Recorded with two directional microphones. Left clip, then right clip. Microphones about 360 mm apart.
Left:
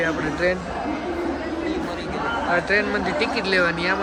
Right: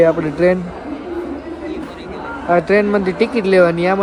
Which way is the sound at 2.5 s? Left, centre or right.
Centre.